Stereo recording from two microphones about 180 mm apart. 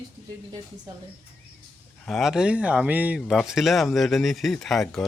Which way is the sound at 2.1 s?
Centre (ahead or behind).